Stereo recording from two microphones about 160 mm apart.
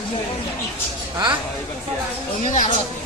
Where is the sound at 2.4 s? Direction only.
45° left (ahead or behind).